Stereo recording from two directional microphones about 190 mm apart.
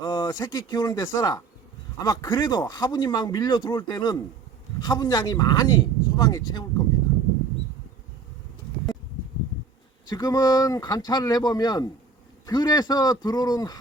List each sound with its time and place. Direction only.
0.0 s speech: 20° left (ahead or behind)
10.1 s speech: 20° left (ahead or behind)